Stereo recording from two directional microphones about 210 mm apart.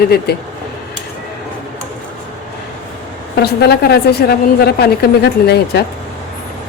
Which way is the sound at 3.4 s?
50° left (ahead or behind).